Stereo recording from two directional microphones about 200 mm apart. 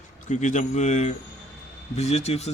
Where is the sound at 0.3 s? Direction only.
35° left (ahead or behind).